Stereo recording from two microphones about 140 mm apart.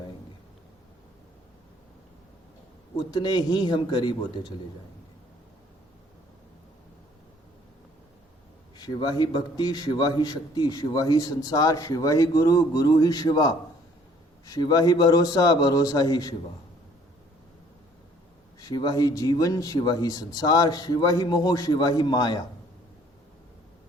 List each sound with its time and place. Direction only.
3.1 s a man's voice: 30° left (ahead or behind)
8.8 s a man's voice: 30° left (ahead or behind)
18.6 s a man's voice: 30° left (ahead or behind)